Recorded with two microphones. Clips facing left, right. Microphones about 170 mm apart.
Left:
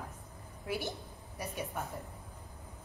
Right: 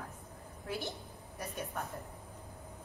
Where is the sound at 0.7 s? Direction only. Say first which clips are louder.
Left 2 dB; 15° left (ahead or behind).